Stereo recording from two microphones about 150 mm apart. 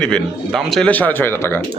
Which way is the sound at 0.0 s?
5° left (ahead or behind).